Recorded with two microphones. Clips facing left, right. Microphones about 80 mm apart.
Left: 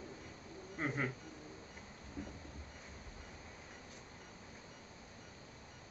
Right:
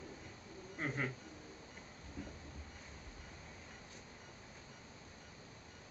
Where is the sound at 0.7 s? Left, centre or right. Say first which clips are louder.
Left 2 dB; centre.